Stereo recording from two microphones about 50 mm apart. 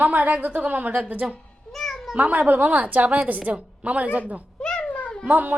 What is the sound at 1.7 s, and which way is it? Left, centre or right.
Meow, centre.